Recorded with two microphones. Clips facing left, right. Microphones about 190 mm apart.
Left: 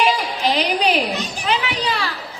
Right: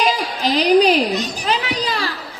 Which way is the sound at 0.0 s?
40° right (ahead or behind).